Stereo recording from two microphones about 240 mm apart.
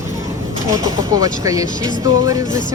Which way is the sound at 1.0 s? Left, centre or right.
Centre.